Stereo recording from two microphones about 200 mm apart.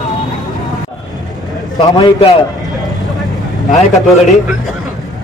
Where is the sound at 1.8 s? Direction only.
25° left (ahead or behind).